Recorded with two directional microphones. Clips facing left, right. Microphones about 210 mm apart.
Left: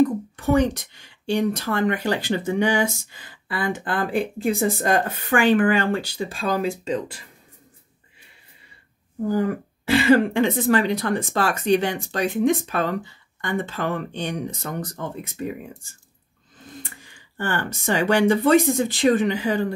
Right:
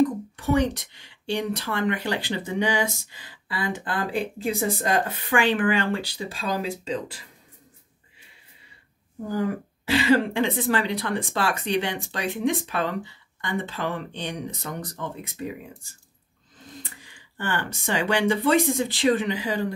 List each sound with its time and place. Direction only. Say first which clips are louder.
0.5 s speech: left 3 dB; 45° left (ahead or behind)
9.8 s speech: left 4 dB; 50° left (ahead or behind)
17.0 s speech: left 3 dB; 45° left (ahead or behind)